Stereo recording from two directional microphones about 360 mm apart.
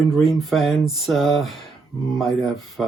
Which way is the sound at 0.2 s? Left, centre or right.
Centre.